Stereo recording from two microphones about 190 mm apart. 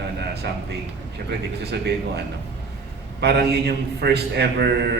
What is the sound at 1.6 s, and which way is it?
A man's voice, 60° right (ahead or behind).